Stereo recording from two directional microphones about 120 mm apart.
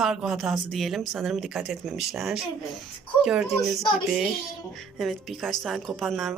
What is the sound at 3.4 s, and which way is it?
Speech, 25° left (ahead or behind).